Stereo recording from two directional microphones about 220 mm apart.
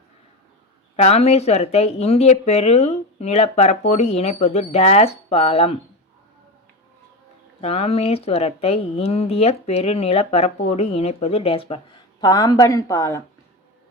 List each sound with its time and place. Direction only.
0.9 s speech: 30° left (ahead or behind)
7.6 s a woman's voice: 30° left (ahead or behind)